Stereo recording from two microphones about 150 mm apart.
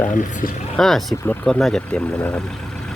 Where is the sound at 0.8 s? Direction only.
Centre (ahead or behind).